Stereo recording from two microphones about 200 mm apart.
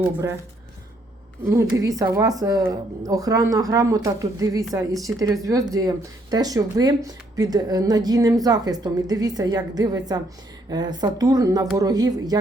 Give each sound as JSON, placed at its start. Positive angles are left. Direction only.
{"t": 0.0, "sound": "a woman's voice", "side_deg": -10}
{"t": 1.5, "sound": "a woman's voice", "side_deg": -15}